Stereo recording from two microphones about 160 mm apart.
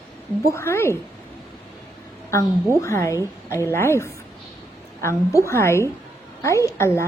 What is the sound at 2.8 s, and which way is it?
A woman's voice, 20° left (ahead or behind).